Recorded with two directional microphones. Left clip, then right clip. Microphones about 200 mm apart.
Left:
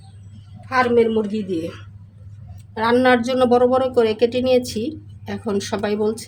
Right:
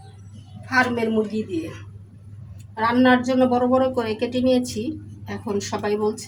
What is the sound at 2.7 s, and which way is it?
A woman's voice, 55° left (ahead or behind).